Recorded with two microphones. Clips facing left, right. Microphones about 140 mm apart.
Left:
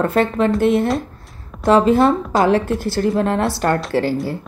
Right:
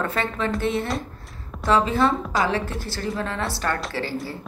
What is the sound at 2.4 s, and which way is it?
A woman's voice, 60° left (ahead or behind).